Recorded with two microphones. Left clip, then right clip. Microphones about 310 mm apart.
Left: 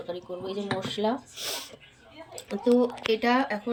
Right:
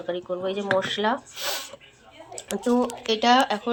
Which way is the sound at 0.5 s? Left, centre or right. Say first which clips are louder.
Right 7 dB; right.